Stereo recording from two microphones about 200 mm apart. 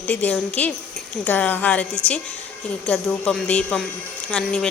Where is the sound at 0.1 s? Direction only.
10° left (ahead or behind).